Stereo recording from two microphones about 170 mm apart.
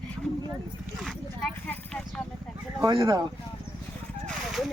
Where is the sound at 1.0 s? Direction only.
Centre (ahead or behind).